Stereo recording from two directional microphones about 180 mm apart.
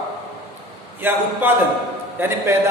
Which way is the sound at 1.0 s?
10° right (ahead or behind).